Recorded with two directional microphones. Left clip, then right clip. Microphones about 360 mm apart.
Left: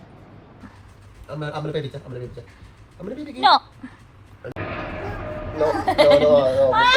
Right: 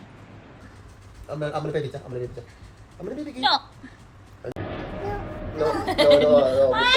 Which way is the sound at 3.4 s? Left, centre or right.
Centre.